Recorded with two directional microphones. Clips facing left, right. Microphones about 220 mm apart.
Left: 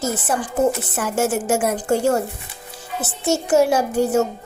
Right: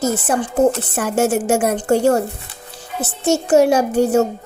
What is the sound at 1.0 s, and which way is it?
A child's voice, 65° right (ahead or behind).